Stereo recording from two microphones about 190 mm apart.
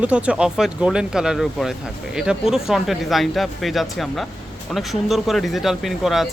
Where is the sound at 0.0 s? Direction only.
5° right (ahead or behind).